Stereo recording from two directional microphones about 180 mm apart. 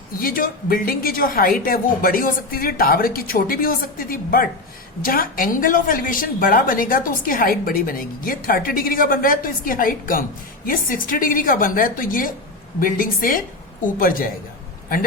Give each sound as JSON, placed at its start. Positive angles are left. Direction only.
{"t": 0.2, "sound": "a woman's voice", "side_deg": 50}